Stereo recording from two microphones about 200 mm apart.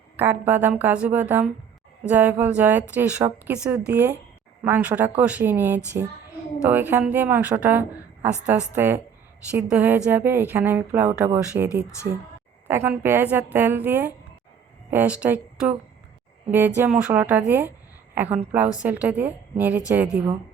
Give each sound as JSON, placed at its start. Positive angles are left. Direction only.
{"t": 0.2, "sound": "a woman's voice", "side_deg": -10}